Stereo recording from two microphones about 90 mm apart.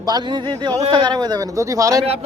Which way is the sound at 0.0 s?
55° right (ahead or behind).